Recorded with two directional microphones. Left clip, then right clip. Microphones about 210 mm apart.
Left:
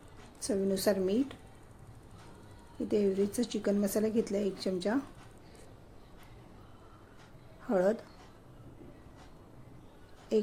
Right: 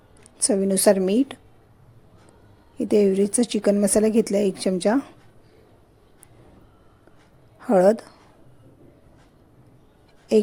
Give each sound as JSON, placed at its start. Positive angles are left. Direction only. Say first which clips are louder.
{"t": 0.4, "sound": "speech", "louder": "right 12 dB", "side_deg": -45}
{"t": 2.8, "sound": "speech", "louder": "right 11 dB", "side_deg": -45}
{"t": 7.6, "sound": "speech", "louder": "right 12 dB", "side_deg": -45}
{"t": 10.3, "sound": "speech", "louder": "right 11 dB", "side_deg": -45}